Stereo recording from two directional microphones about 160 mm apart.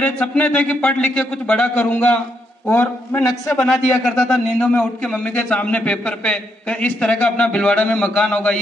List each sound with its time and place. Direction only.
0.0 s a man's voice: 10° left (ahead or behind)
3.7 s a man's voice: centre (ahead or behind)